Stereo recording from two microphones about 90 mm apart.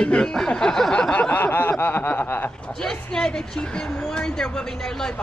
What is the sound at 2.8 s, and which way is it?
Speech, 10° left (ahead or behind).